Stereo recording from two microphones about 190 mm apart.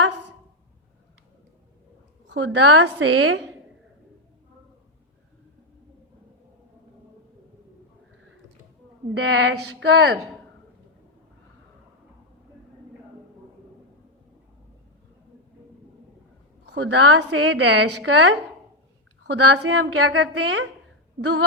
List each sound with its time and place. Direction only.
2.2 s a woman's voice: 70° right (ahead or behind)
9.1 s speech: 65° right (ahead or behind)
16.6 s a woman's voice: 65° right (ahead or behind)
19.3 s a woman's voice: 85° right; by 20.7 s 70° right (ahead or behind)